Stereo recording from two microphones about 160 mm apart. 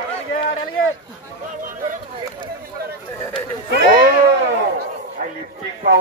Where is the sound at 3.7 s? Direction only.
65° right (ahead or behind).